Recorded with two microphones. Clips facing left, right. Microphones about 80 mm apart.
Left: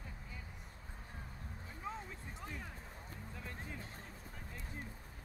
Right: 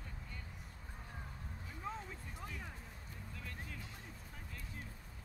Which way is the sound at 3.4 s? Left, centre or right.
Left.